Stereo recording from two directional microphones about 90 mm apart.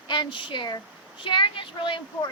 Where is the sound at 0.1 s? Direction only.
65° left (ahead or behind).